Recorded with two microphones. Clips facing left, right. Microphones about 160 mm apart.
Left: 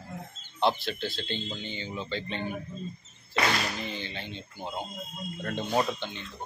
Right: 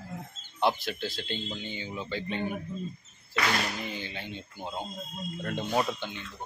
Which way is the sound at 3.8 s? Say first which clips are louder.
Left 1 dB; 10° right (ahead or behind).